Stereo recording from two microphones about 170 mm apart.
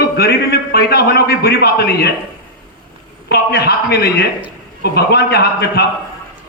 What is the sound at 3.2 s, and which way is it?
A man's voice, 70° left (ahead or behind).